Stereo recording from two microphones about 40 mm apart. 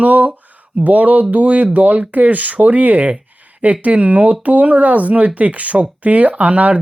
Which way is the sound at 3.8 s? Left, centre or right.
Right.